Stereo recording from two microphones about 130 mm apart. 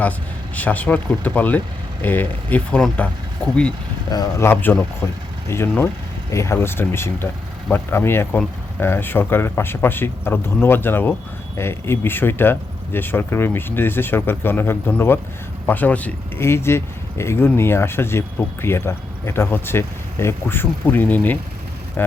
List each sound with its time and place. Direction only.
0.5 s speech: 10° left (ahead or behind)
4.1 s speech: 25° left (ahead or behind)